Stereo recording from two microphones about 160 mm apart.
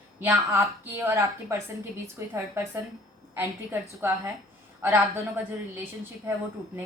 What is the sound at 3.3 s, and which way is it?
A woman's voice, 15° right (ahead or behind).